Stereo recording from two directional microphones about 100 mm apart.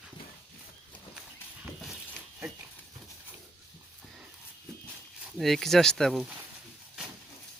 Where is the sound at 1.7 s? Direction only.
Centre (ahead or behind).